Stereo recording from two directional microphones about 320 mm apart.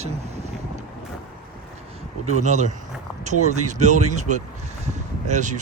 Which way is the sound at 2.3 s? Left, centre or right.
Right.